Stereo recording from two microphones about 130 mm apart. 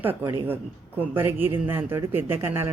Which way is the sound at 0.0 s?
15° right (ahead or behind).